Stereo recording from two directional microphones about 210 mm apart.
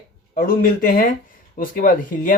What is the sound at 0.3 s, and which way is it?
Speech, 45° left (ahead or behind).